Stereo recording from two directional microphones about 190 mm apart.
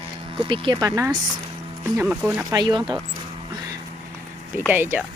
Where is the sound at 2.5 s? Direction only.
20° right (ahead or behind).